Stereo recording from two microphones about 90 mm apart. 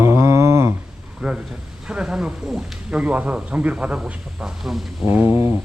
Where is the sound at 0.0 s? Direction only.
30° right (ahead or behind).